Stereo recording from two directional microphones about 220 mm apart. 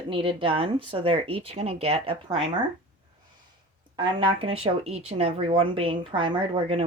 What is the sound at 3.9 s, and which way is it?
Speech, 20° right (ahead or behind).